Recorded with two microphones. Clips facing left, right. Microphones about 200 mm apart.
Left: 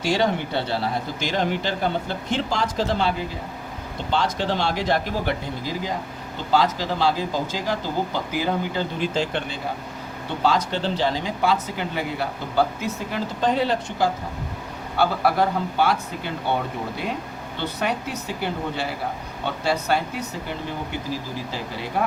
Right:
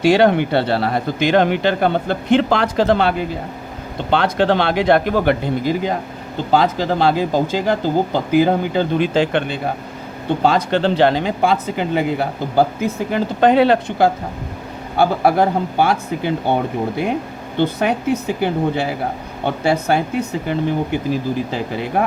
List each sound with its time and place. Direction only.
0.0 s speech: 65° right (ahead or behind)
14.9 s speech: 50° right (ahead or behind)